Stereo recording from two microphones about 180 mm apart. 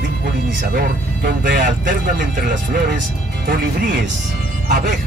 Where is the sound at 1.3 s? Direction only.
70° right (ahead or behind).